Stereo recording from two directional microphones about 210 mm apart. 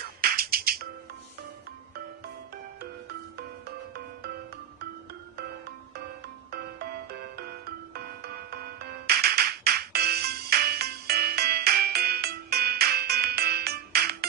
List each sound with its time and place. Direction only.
0.2 s music: 45° right (ahead or behind)
6.5 s music: 50° right (ahead or behind)